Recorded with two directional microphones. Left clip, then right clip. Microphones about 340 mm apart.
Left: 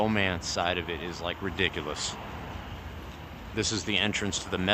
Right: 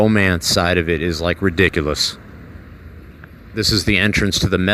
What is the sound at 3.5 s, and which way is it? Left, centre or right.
Speech, centre.